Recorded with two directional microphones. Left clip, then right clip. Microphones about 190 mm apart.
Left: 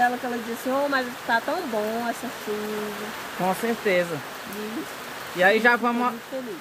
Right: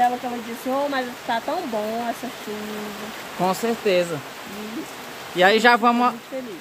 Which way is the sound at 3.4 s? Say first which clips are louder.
Right 3 dB; 25° right (ahead or behind).